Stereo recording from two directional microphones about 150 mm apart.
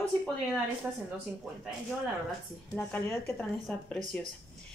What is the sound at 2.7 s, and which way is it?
A woman's voice, 15° left (ahead or behind).